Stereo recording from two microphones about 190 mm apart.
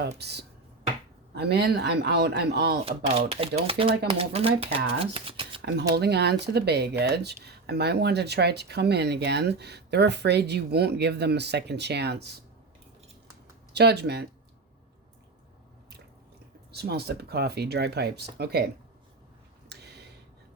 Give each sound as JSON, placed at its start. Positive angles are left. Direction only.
{"t": 0.2, "sound": "speech", "side_deg": -60}
{"t": 2.8, "sound": "speech", "side_deg": -30}
{"t": 5.9, "sound": "speech", "side_deg": -60}
{"t": 13.7, "sound": "speech", "side_deg": -60}
{"t": 16.7, "sound": "speech", "side_deg": -55}
{"t": 19.6, "sound": "a sound", "side_deg": -60}